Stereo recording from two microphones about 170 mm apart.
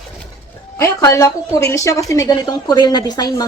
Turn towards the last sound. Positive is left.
turn(degrees=25)  # may be behind; listen again after turning